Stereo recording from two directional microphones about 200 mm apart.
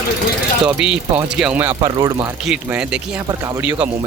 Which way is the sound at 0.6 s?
5° right (ahead or behind).